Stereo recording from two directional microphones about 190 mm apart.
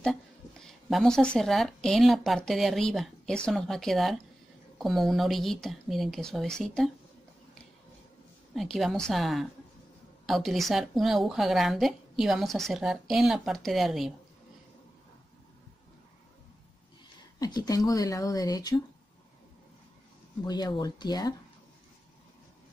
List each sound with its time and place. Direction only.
0.0 s a woman's voice: 5° left (ahead or behind)
8.5 s speech: centre (ahead or behind)
17.4 s speech: 20° left (ahead or behind)
20.4 s speech: 20° left (ahead or behind)